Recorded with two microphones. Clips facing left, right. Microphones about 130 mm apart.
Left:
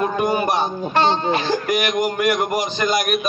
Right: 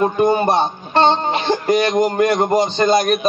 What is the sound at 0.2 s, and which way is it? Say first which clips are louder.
Speech: right 5 dB; 30° right (ahead or behind).